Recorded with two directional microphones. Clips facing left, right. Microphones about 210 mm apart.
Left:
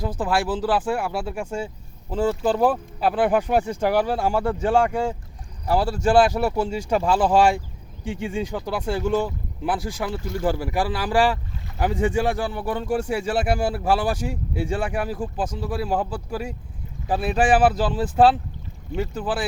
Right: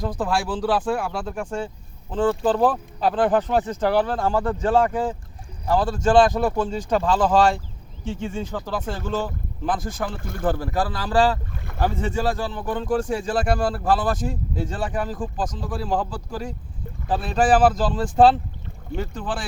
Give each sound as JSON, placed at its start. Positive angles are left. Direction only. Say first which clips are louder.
{"t": 0.0, "sound": "speech", "louder": "left 1 dB", "side_deg": 5}
{"t": 10.2, "sound": "speech", "louder": "left 5 dB", "side_deg": -55}
{"t": 10.6, "sound": "speech", "louder": "left 1 dB", "side_deg": 10}